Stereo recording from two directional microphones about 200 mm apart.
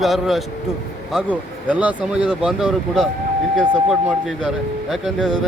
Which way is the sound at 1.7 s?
5° right (ahead or behind).